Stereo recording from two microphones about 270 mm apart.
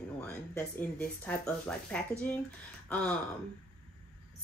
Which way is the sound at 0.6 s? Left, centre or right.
Centre.